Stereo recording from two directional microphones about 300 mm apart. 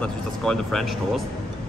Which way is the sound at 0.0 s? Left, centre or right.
Centre.